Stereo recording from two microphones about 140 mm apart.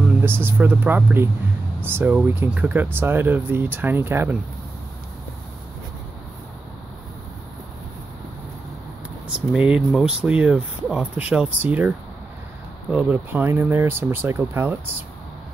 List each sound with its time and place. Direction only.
0.2 s speech: 15° right (ahead or behind)
9.5 s speech: 5° right (ahead or behind)
12.9 s speech: 15° right (ahead or behind)